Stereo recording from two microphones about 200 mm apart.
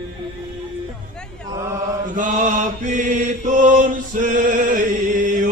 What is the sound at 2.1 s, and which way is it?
Mantra, 40° right (ahead or behind).